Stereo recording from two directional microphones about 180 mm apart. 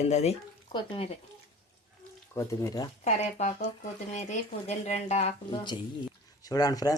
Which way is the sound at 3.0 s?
40° left (ahead or behind).